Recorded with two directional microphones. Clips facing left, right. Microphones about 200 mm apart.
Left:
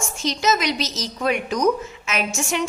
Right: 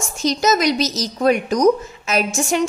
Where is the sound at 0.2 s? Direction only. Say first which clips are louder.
Right 5 dB; 40° right (ahead or behind).